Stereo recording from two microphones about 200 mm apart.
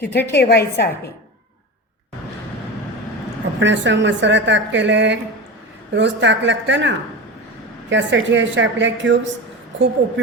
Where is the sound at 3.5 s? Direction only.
65° right (ahead or behind).